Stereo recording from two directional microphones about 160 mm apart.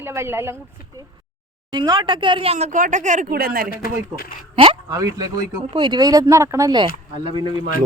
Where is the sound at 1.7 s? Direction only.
25° right (ahead or behind); by 3.7 s 65° right (ahead or behind).